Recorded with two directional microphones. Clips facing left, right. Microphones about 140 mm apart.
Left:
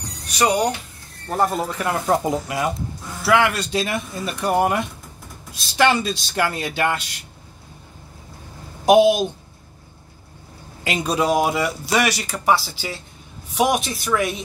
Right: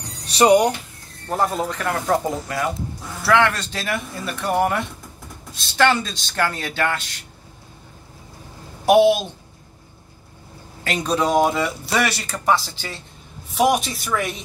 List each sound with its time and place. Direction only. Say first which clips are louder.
0.3 s speech: right 6 dB; 30° right (ahead or behind)
1.3 s speech: left 1 dB; centre (ahead or behind)
1.8 s a man's voice: left 1 dB; 15° left (ahead or behind)
8.8 s a man's voice: left 1 dB; 15° left (ahead or behind)
10.8 s a man's voice: even; 10° left (ahead or behind)